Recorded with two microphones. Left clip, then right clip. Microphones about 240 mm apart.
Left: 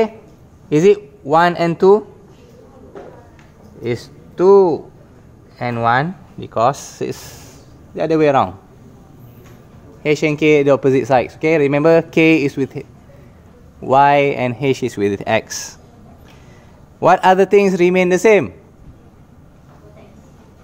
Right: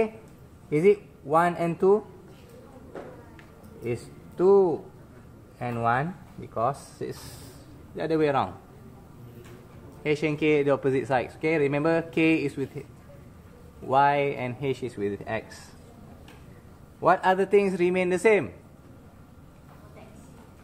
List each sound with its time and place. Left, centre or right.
0.7 s a man's voice: left
3.8 s speech: left
10.0 s speech: left
13.8 s speech: left
17.0 s speech: left